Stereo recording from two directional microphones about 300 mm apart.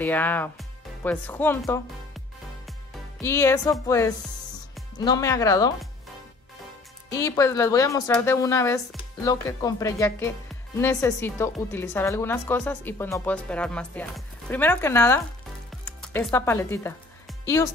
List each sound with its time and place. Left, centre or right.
0.0 s music: centre
3.2 s speech: centre
7.1 s speech: centre
15.8 s music: centre